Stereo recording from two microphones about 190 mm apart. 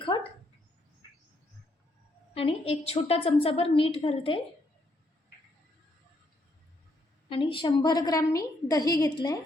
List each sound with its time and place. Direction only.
0.0 s dog: 25° left (ahead or behind)
2.3 s a woman's voice: 30° left (ahead or behind)
7.3 s a woman's voice: 25° left (ahead or behind)